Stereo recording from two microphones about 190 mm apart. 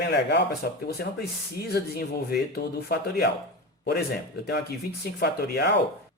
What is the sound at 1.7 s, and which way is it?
Speech, 55° left (ahead or behind).